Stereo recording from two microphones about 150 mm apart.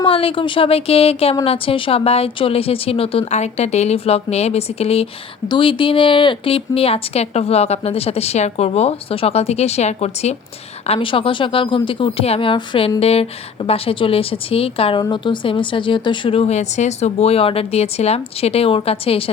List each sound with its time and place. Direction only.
0.0 s a woman's voice: 35° left (ahead or behind)